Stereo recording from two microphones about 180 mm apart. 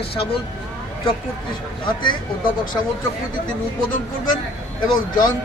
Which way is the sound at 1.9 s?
25° left (ahead or behind).